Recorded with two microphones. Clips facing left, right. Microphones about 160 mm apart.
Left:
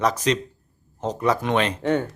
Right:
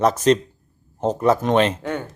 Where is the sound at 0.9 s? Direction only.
10° right (ahead or behind).